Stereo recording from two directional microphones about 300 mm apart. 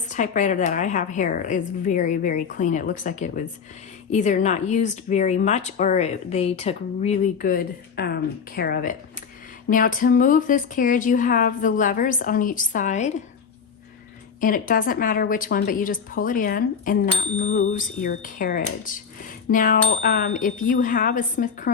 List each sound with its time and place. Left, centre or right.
0.1 s speech: left
14.4 s speech: left